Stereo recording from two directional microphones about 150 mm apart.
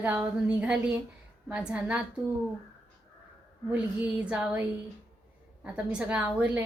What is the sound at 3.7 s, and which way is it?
Speech, 10° right (ahead or behind).